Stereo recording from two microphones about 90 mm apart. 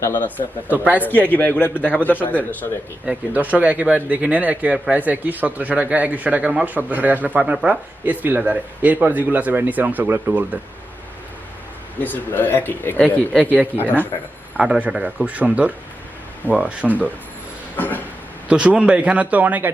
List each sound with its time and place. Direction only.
0.0 s a man's voice: 25° left (ahead or behind)
0.7 s speech: 20° right (ahead or behind)
1.0 s a man's voice: 20° left (ahead or behind)
3.1 s speech: 15° right (ahead or behind)
11.9 s a man's voice: 20° left (ahead or behind)
14.5 s speech: 10° right (ahead or behind)
17.7 s a man's voice: 20° left (ahead or behind)
18.4 s speech: 15° right (ahead or behind)